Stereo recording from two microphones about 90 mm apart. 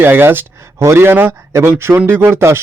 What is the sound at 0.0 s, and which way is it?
Speech, 25° right (ahead or behind).